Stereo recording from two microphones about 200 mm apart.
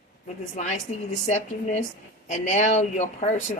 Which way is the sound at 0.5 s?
35° left (ahead or behind).